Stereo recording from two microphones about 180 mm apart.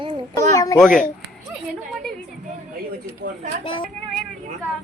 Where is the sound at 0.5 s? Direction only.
20° left (ahead or behind).